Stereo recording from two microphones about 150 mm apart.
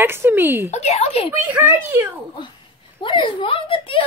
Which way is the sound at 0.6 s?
50° left (ahead or behind).